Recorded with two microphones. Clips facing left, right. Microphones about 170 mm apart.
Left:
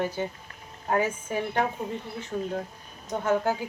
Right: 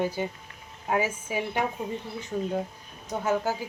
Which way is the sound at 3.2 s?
5° right (ahead or behind).